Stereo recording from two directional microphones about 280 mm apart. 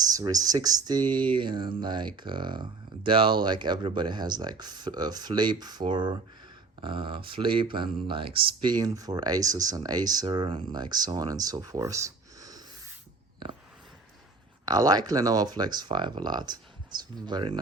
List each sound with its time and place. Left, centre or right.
0.0 s speech: centre
14.6 s speech: centre